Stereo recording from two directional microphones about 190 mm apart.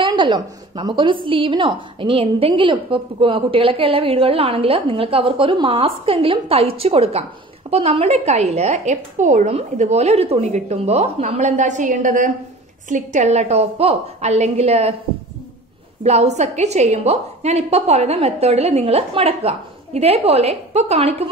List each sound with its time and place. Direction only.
0.0 s a woman's voice: 25° right (ahead or behind)
16.0 s a woman's voice: 35° right (ahead or behind)